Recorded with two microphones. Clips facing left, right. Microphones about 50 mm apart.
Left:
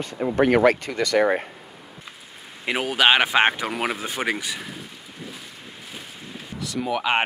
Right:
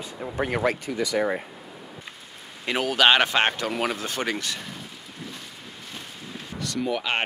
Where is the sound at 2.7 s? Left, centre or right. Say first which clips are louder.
Left 1 dB; centre.